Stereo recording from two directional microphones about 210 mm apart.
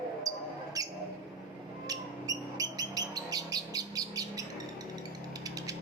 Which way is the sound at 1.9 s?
15° right (ahead or behind).